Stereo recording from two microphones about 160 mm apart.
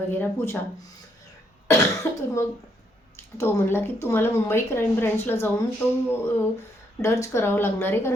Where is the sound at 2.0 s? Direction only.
15° left (ahead or behind).